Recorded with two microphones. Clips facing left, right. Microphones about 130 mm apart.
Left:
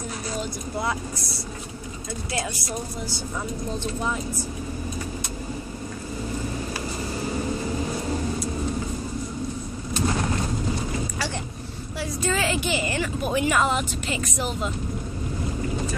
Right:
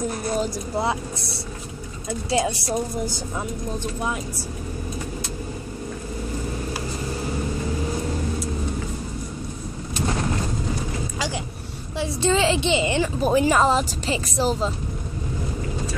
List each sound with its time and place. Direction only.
0.3 s speech: 40° right (ahead or behind)
2.3 s a woman's voice: 20° right (ahead or behind)
4.0 s speech: 10° right (ahead or behind)
12.0 s vehicle: 25° right (ahead or behind)
13.2 s speech: 35° right (ahead or behind)